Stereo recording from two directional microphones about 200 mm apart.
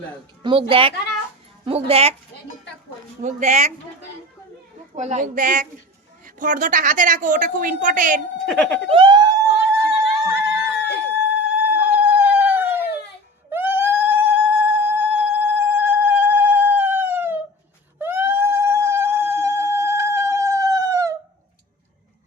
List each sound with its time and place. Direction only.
0.7 s speech: 25° right (ahead or behind)
3.2 s a woman's voice: 35° right (ahead or behind)
4.9 s a woman's voice: 35° right (ahead or behind)
8.4 s speech: 5° left (ahead or behind)
8.9 s speech: 25° right (ahead or behind)
9.9 s a sound: 15° right (ahead or behind)
11.2 s cat: 10° right (ahead or behind)
13.5 s a sound: 10° right (ahead or behind)